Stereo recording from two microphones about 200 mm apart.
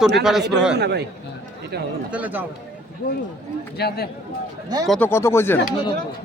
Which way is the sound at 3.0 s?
40° left (ahead or behind).